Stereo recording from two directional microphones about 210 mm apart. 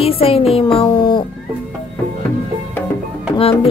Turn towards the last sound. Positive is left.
turn(degrees=25)  # may be behind; listen again after turning